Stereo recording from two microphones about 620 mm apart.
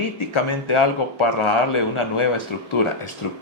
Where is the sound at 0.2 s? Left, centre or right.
Left.